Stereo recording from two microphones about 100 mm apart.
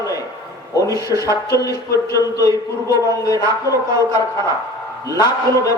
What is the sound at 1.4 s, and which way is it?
A man's voice, 35° left (ahead or behind).